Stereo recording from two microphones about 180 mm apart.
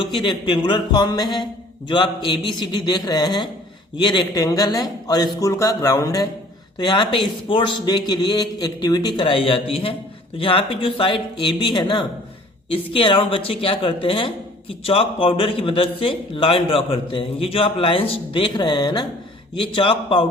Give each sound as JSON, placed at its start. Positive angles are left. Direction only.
{"t": 0.0, "sound": "speech", "side_deg": 25}